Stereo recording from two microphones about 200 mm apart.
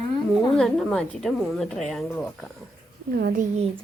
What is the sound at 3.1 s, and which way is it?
Speech, 55° right (ahead or behind).